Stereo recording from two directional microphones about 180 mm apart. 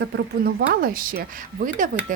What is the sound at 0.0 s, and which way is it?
Speech, 65° right (ahead or behind).